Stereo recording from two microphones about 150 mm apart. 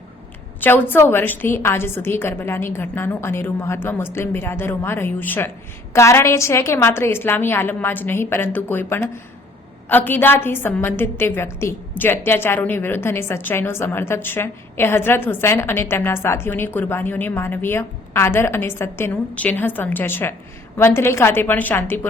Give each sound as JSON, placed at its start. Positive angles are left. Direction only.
{"t": 0.6, "sound": "a woman's voice", "side_deg": 15}